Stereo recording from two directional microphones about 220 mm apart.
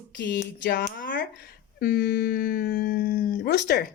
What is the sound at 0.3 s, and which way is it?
Speech, 50° left (ahead or behind).